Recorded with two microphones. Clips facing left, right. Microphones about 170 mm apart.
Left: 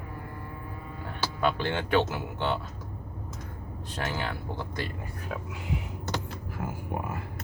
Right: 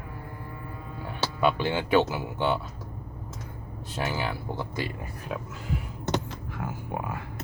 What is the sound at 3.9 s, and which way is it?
Speech, 5° right (ahead or behind).